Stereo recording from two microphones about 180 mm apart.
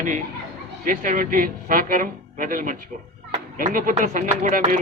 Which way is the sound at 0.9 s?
50° right (ahead or behind).